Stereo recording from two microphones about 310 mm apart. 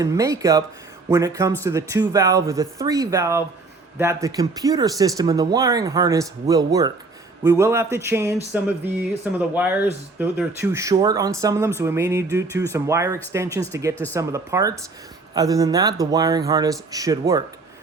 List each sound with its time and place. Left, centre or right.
0.0 s speech: centre
8.5 s a sound: centre
9.6 s speech: centre